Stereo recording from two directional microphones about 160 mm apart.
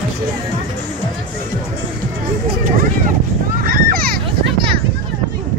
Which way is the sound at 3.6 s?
65° right (ahead or behind).